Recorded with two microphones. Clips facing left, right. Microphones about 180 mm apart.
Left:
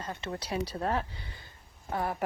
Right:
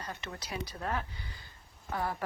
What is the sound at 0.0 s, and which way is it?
Speech, 25° left (ahead or behind).